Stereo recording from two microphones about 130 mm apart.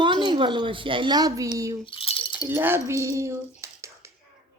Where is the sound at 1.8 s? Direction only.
45° left (ahead or behind).